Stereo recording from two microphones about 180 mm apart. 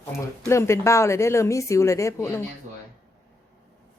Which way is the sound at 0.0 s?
15° left (ahead or behind).